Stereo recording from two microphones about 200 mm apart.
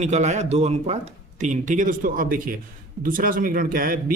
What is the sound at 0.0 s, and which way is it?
Speech, 35° right (ahead or behind).